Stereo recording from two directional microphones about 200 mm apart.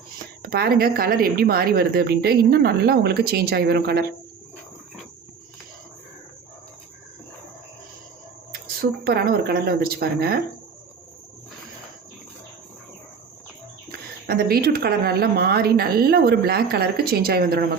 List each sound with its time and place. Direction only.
0.4 s a woman's voice: 50° right (ahead or behind)
8.6 s a woman's voice: 50° right (ahead or behind)
13.9 s a woman's voice: 50° right (ahead or behind)